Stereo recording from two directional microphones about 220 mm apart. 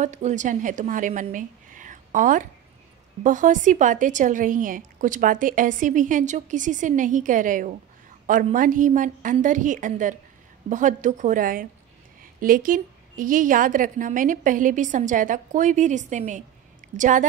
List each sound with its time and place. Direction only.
0.0 s a woman's voice: 35° right (ahead or behind)